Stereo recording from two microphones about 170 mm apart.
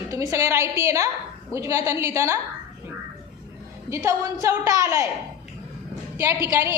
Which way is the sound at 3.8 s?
20° right (ahead or behind).